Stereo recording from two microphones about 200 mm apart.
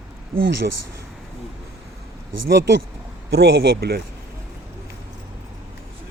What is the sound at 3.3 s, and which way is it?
Speech, 55° right (ahead or behind).